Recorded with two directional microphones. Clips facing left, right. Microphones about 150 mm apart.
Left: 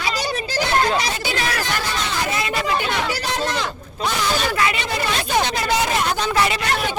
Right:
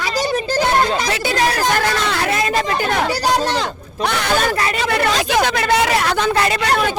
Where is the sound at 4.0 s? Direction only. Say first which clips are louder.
Right 4 dB; 65° right (ahead or behind).